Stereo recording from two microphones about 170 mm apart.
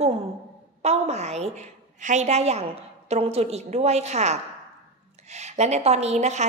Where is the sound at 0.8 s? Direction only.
40° right (ahead or behind).